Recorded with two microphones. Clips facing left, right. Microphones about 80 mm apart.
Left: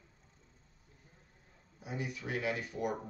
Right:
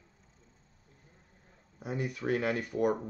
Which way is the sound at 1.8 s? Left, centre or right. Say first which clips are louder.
Right 5 dB; right.